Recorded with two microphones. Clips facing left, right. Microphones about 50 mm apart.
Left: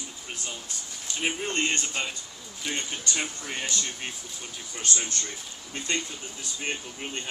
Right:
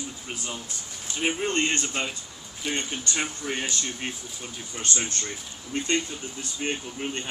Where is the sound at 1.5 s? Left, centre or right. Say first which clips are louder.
Right 2 dB; centre.